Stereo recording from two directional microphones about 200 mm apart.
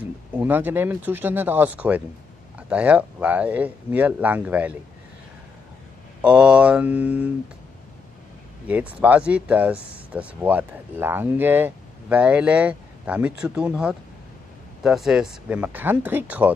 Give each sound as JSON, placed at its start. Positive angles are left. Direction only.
{"t": 0.0, "sound": "speech", "side_deg": -10}
{"t": 6.2, "sound": "speech", "side_deg": -5}
{"t": 8.6, "sound": "speech", "side_deg": -10}